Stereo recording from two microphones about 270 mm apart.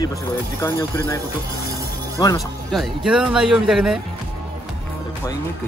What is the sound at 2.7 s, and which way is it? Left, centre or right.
Speech, centre.